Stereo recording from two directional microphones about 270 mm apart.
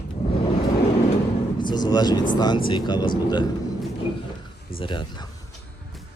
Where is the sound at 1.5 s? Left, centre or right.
Centre.